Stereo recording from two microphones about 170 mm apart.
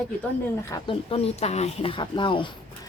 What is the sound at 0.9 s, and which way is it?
Speech, 35° left (ahead or behind).